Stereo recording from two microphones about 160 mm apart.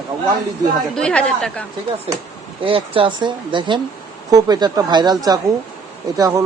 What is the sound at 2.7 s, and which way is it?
Speech, 35° right (ahead or behind).